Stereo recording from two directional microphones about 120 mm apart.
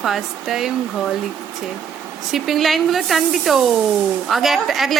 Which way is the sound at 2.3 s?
Centre (ahead or behind).